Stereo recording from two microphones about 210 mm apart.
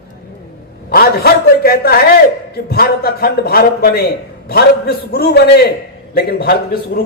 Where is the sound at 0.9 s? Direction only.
45° left (ahead or behind).